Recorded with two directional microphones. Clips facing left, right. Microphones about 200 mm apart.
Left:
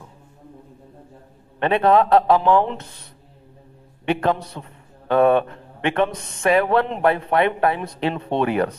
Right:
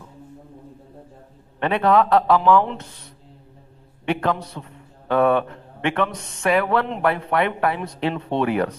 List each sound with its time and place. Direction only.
1.5 s speech: 25° left (ahead or behind)
4.0 s speech: 20° left (ahead or behind)